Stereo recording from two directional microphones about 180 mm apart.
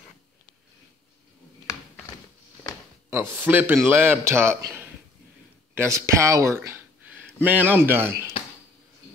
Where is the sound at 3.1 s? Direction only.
10° right (ahead or behind).